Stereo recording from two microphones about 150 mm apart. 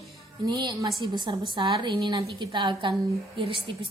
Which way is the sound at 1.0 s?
30° right (ahead or behind).